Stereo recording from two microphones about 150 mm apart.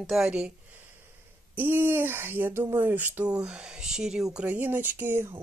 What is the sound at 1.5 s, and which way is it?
Speech, 10° right (ahead or behind).